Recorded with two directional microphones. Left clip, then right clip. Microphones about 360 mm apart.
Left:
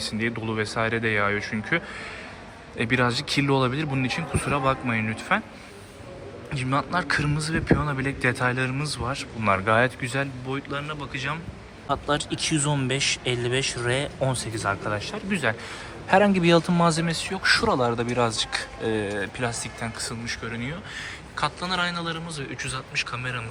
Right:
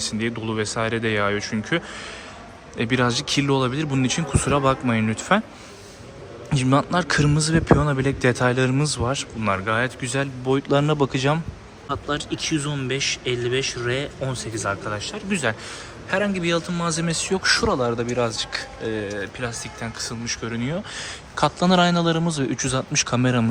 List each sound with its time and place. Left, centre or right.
0.0 s a man's voice: centre
6.5 s a man's voice: centre
11.9 s a man's voice: centre